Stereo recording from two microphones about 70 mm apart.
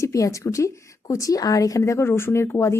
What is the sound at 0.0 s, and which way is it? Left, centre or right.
A woman's voice, left.